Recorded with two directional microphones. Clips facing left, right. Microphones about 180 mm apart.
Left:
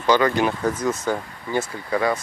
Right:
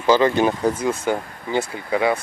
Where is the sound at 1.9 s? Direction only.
10° right (ahead or behind).